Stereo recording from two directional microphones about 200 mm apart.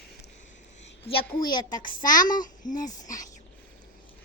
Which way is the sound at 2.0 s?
40° left (ahead or behind).